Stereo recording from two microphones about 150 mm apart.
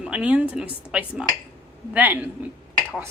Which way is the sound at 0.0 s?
5° right (ahead or behind).